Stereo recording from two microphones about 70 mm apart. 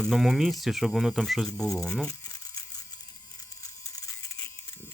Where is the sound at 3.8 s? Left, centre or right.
Left.